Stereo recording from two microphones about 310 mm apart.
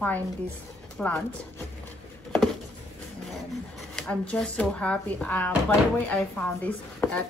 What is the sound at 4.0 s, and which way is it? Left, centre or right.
Speech, centre.